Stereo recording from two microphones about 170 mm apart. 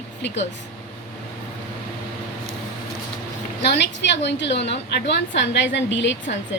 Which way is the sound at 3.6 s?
90° left.